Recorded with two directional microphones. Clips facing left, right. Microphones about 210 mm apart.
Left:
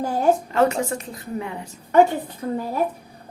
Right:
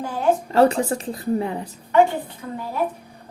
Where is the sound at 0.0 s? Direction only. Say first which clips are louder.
Left 4 dB; 40° left (ahead or behind).